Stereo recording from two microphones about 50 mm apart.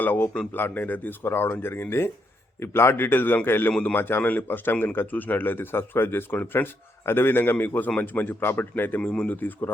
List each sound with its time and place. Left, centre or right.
0.0 s a man's voice: left
3.7 s a man's voice: left
3.9 s a man's voice: left